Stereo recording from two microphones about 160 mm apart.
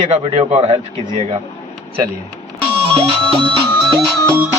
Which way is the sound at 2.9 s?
30° right (ahead or behind).